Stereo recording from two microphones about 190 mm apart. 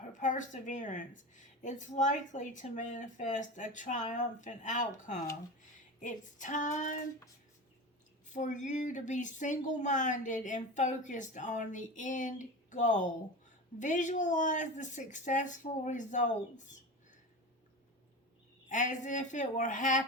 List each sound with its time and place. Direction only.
0.0 s speech: 40° left (ahead or behind)
8.3 s speech: 40° left (ahead or behind)
18.7 s speech: 40° left (ahead or behind)